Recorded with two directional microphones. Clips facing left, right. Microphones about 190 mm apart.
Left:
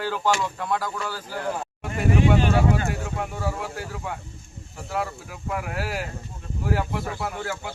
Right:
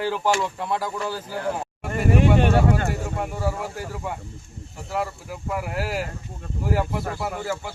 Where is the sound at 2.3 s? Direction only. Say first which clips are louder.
Right 2 dB; 55° right (ahead or behind).